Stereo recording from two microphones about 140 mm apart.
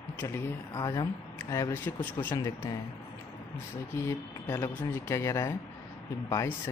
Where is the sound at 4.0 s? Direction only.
20° left (ahead or behind).